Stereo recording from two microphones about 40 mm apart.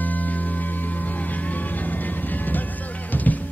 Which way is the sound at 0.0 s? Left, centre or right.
Left.